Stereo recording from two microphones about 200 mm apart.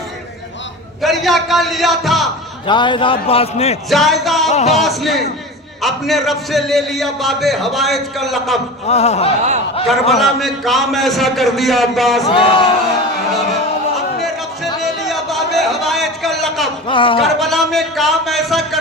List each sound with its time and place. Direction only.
1.0 s a man's voice: centre (ahead or behind)
2.6 s a man's voice: 25° left (ahead or behind)
3.8 s a man's voice: centre (ahead or behind)
4.4 s speech: 35° left (ahead or behind)
4.8 s a man's voice: centre (ahead or behind)
8.9 s speech: 30° left (ahead or behind)
10.2 s a man's voice: centre (ahead or behind)
12.3 s a man's voice: 25° left (ahead or behind)
14.8 s a sound: centre (ahead or behind)
16.9 s a man's voice: 25° left (ahead or behind)
17.4 s a man's voice: centre (ahead or behind)